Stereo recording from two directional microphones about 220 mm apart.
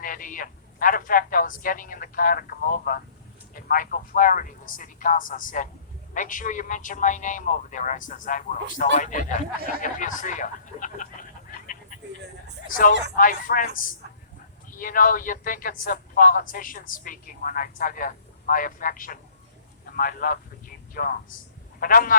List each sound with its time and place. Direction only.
0.0 s a man's voice: 40° left (ahead or behind)
14.8 s a man's voice: 40° left (ahead or behind)